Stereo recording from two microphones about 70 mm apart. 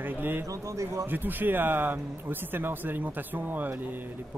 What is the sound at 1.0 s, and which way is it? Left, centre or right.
Speech, right.